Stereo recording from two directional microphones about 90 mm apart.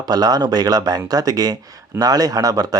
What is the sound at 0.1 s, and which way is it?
Speech, 45° right (ahead or behind).